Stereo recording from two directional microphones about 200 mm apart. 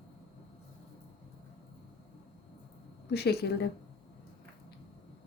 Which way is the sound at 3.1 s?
55° left (ahead or behind).